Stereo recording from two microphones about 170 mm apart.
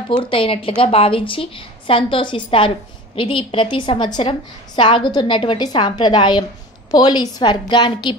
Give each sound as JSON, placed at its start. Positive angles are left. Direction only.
{"t": 0.1, "sound": "a woman's voice", "side_deg": 30}